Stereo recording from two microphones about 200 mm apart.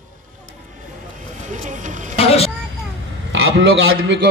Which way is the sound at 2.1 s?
30° left (ahead or behind).